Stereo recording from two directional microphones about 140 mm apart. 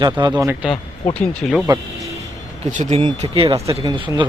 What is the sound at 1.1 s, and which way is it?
Speech, 5° left (ahead or behind).